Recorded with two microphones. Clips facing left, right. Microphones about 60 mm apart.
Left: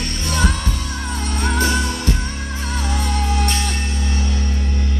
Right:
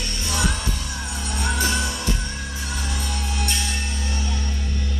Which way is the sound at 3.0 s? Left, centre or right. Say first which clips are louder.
Left 7 dB; left.